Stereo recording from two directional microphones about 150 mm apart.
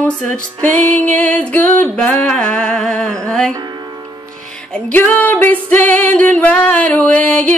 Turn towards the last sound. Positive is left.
turn(degrees=10)  # may be behind; listen again after turning